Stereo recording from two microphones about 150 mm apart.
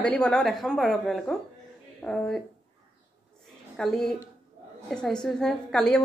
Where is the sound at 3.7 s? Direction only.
Centre (ahead or behind).